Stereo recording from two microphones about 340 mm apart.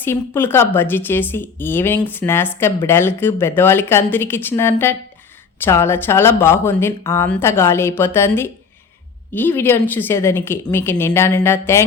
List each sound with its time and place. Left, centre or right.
0.0 s speech: centre